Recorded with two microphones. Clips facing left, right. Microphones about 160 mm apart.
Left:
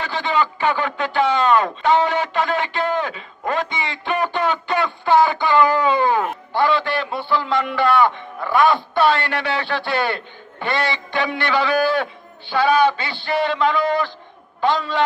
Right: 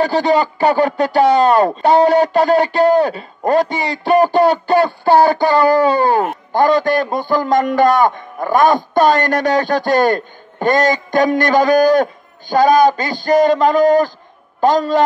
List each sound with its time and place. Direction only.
0.0 s a man's voice: 40° right (ahead or behind)